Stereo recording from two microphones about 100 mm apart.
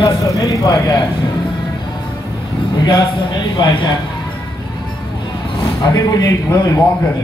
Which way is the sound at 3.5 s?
50° left (ahead or behind).